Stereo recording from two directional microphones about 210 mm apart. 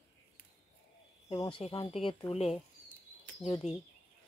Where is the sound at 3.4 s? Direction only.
Centre (ahead or behind).